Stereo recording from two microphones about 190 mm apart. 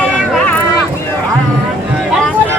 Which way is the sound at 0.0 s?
5° left (ahead or behind).